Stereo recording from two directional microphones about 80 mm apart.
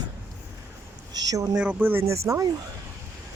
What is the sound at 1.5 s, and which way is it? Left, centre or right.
Speech, centre.